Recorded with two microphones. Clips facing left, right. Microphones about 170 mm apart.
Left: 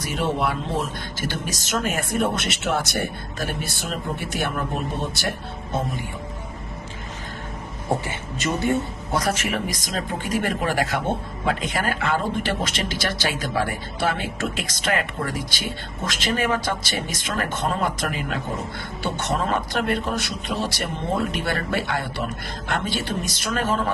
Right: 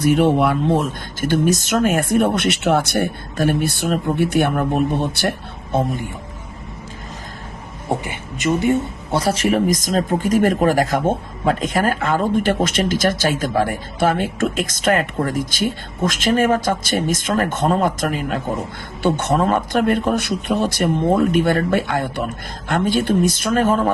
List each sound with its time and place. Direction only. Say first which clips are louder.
0.0 s speech: right 9 dB; 55° right (ahead or behind)
8.0 s speech: right 5 dB; 15° right (ahead or behind)
9.1 s speech: right 7 dB; 30° right (ahead or behind); by 23.9 s 50° right (ahead or behind)